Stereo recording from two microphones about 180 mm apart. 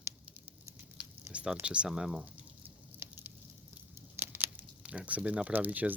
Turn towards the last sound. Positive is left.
turn(degrees=-10)  # may be behind; listen again after turning